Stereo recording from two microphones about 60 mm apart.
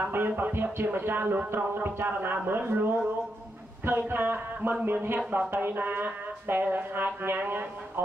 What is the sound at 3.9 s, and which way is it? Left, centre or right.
A man's voice, right.